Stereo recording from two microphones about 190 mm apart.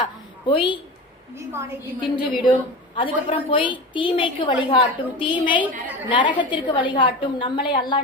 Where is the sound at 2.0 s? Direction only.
25° left (ahead or behind).